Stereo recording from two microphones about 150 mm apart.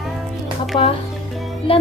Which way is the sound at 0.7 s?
30° left (ahead or behind).